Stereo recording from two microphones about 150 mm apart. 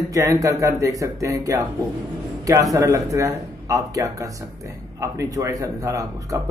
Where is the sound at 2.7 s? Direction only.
20° right (ahead or behind).